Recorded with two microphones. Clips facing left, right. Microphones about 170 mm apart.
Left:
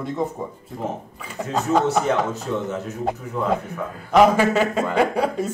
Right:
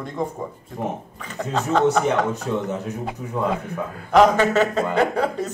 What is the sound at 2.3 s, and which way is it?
Speech, 15° right (ahead or behind).